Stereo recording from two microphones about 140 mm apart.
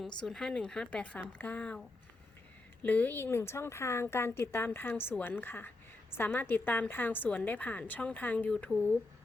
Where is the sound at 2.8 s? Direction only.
10° left (ahead or behind).